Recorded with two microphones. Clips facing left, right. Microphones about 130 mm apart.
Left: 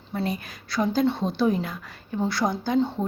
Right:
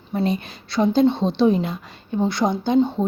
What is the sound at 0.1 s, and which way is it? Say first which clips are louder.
A woman's voice: right 6 dB; 25° right (ahead or behind).